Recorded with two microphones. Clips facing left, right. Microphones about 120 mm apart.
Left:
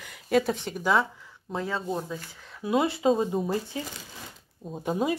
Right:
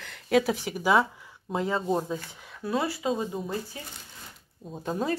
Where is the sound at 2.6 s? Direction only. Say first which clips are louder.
Left 4 dB; 20° left (ahead or behind); by 3.8 s 35° left (ahead or behind).